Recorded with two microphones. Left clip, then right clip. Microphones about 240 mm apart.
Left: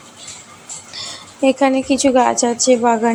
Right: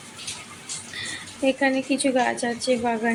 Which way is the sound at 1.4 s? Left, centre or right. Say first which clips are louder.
Left 8 dB; left.